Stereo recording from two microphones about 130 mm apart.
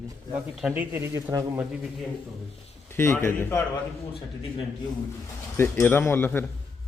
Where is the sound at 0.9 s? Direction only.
20° right (ahead or behind).